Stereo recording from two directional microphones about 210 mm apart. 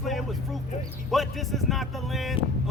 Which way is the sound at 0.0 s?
Centre (ahead or behind).